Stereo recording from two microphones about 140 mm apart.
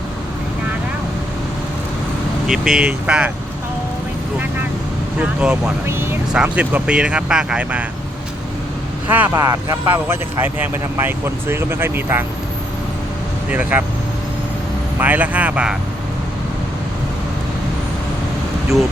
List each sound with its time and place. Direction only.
2.5 s speech: 5° right (ahead or behind)
5.2 s speech: 10° right (ahead or behind)
9.0 s speech: 10° right (ahead or behind)
9.3 s speech: 25° right (ahead or behind)
13.5 s speech: 15° right (ahead or behind)
14.9 s speech: 10° right (ahead or behind)